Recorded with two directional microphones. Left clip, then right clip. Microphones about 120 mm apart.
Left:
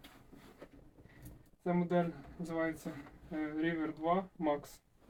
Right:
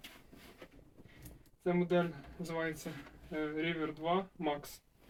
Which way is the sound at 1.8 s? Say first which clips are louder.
Right 1 dB; 15° right (ahead or behind).